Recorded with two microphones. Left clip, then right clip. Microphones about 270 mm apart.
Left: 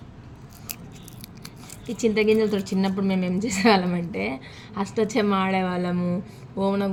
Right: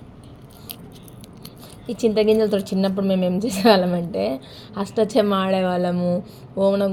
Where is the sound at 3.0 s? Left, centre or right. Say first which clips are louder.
Right 5 dB; centre.